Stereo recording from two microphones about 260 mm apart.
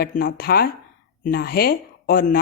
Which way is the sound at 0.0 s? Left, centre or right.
Left.